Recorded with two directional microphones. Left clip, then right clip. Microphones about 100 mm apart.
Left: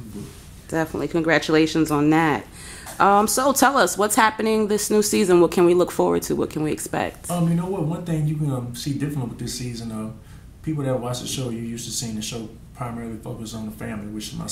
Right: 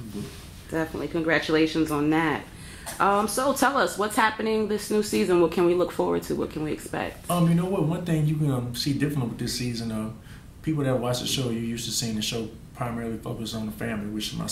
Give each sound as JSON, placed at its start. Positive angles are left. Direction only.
{"t": 0.7, "sound": "a woman's voice", "side_deg": 35}
{"t": 7.2, "sound": "a man's voice", "side_deg": 0}